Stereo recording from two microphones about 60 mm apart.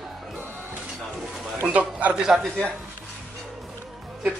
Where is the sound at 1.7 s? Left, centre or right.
Right.